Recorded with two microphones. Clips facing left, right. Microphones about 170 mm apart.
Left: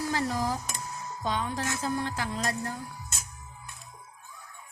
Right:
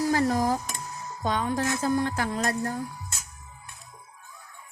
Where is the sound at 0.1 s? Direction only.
45° right (ahead or behind).